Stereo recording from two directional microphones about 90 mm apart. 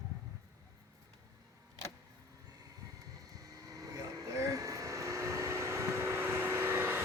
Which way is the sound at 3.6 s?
40° right (ahead or behind).